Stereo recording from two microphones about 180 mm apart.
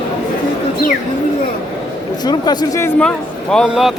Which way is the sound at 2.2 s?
25° left (ahead or behind).